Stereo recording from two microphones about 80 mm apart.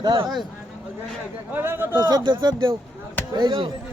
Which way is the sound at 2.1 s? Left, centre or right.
Right.